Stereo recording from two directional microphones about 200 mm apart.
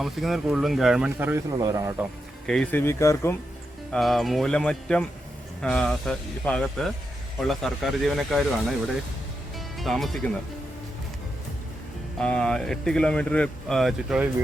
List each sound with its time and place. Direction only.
0.0 s speech: centre (ahead or behind)
2.5 s speech: 5° left (ahead or behind)
3.9 s speech: centre (ahead or behind)
9.7 s speech: centre (ahead or behind)
12.2 s speech: 5° left (ahead or behind)